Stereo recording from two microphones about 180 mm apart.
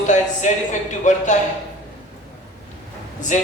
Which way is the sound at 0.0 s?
45° left (ahead or behind).